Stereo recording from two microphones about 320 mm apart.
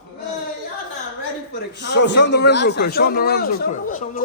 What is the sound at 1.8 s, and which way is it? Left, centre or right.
A man's voice, left.